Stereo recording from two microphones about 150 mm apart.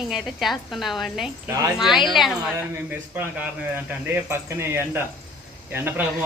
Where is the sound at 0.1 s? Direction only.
Centre (ahead or behind).